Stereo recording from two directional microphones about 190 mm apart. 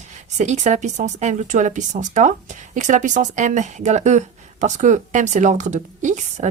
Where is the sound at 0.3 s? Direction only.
40° right (ahead or behind).